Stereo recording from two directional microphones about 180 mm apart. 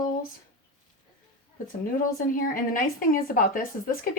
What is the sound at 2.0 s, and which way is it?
A woman's voice, 50° left (ahead or behind).